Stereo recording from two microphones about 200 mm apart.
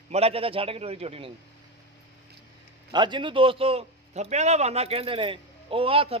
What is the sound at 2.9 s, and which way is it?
A man's voice, 25° right (ahead or behind).